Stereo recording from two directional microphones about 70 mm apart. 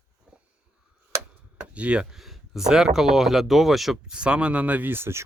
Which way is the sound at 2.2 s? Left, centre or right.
Centre.